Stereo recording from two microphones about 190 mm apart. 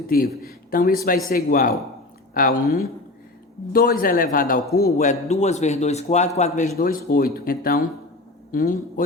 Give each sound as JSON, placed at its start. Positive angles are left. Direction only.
{"t": 0.1, "sound": "a man's voice", "side_deg": 50}
{"t": 6.7, "sound": "a man's voice", "side_deg": 50}